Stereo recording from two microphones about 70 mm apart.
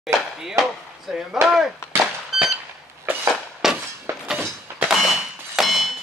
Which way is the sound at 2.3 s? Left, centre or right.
Centre.